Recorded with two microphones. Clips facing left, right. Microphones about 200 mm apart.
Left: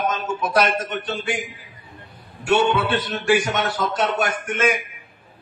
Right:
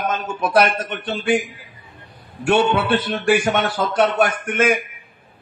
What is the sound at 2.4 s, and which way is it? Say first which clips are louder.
A man's voice: right 2 dB; 55° right (ahead or behind).